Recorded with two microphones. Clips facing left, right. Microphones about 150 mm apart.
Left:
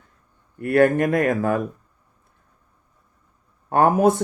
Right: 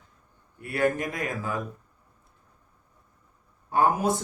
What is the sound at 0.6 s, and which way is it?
Speech, 55° left (ahead or behind).